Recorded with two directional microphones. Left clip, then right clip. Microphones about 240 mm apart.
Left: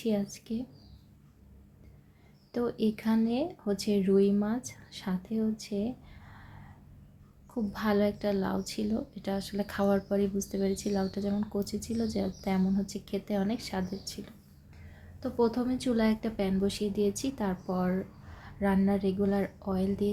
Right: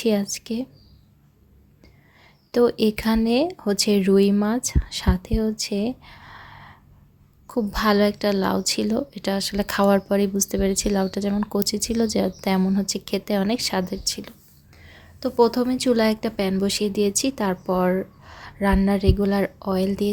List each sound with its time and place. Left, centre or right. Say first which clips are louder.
0.0 s speech: right 10 dB; right
2.5 s a woman's voice: right 12 dB; right